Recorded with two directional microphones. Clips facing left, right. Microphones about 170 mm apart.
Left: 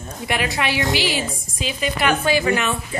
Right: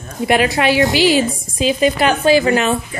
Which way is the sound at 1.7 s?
30° right (ahead or behind).